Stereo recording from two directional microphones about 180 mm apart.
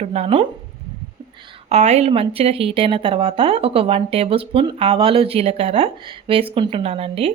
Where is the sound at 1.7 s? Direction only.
40° right (ahead or behind).